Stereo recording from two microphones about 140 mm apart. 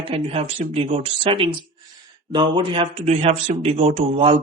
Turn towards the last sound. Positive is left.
turn(degrees=-40)  # may be behind; listen again after turning